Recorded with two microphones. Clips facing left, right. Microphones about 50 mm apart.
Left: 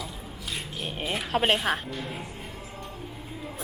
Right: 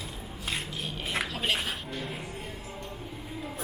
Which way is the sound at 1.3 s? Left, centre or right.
Left.